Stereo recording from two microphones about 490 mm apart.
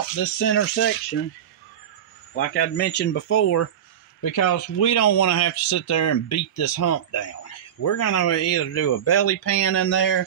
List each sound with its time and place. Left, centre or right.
0.1 s speech: left
2.3 s speech: centre